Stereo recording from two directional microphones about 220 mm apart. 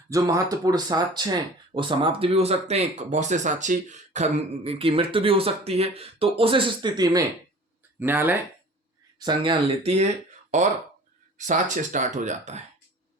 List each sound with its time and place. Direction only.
0.1 s speech: 15° right (ahead or behind)
9.1 s speech: 20° right (ahead or behind)